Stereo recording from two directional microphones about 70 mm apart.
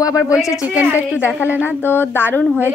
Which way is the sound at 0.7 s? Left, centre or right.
Right.